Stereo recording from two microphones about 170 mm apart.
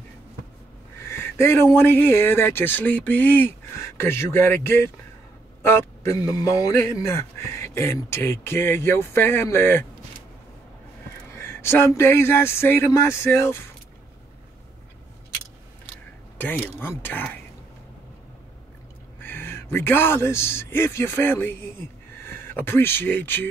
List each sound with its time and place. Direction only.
1.0 s a man's voice: 15° left (ahead or behind)
11.3 s a man's voice: 15° left (ahead or behind)
17.0 s a man's voice: 10° left (ahead or behind)
19.2 s a man's voice: 10° left (ahead or behind)